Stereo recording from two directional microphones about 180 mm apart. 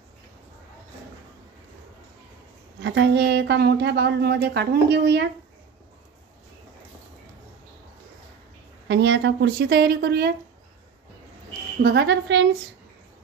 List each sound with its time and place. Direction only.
2.8 s a woman's voice: 75° right (ahead or behind)
8.8 s a woman's voice: 85° right; by 10.3 s 60° right (ahead or behind)
11.9 s a woman's voice: 75° right (ahead or behind)